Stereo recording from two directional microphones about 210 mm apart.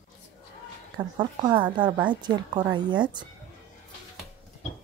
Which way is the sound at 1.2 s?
20° right (ahead or behind).